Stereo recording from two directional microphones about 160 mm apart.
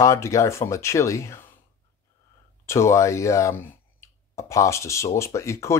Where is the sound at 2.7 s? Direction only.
15° left (ahead or behind).